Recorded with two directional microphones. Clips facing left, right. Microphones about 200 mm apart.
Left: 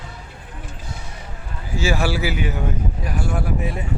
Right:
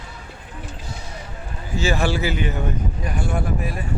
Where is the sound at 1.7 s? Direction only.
10° left (ahead or behind).